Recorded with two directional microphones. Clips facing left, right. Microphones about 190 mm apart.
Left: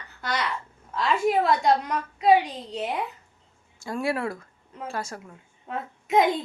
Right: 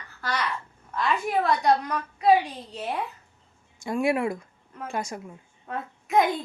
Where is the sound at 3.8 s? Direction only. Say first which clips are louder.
Right 3 dB; 20° right (ahead or behind).